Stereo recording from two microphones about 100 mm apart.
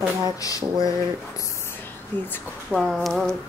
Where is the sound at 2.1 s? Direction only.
20° left (ahead or behind).